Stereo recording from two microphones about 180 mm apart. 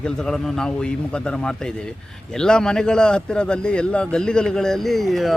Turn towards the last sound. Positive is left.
turn(degrees=0)  # may be behind; listen again after turning